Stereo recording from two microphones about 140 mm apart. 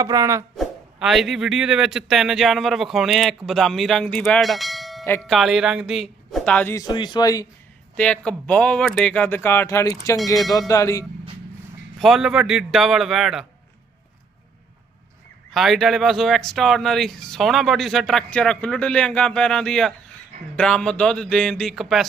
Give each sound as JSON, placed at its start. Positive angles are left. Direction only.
{"t": 0.0, "sound": "speech", "side_deg": -25}
{"t": 0.5, "sound": "speech", "side_deg": 0}
{"t": 6.7, "sound": "speech", "side_deg": 30}
{"t": 7.9, "sound": "speech", "side_deg": 10}
{"t": 11.9, "sound": "speech", "side_deg": 0}
{"t": 15.5, "sound": "speech", "side_deg": 0}